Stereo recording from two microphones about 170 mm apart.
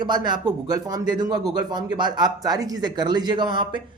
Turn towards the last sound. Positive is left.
turn(degrees=-25)  # may be behind; listen again after turning